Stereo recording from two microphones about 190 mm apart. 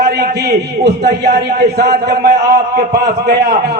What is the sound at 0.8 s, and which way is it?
A man's voice, 60° right (ahead or behind).